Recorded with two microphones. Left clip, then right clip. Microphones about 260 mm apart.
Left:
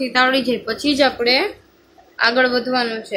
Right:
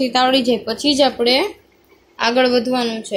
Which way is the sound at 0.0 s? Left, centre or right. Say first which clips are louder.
Right 1 dB; centre.